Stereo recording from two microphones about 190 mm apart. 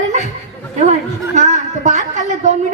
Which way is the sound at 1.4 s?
40° right (ahead or behind).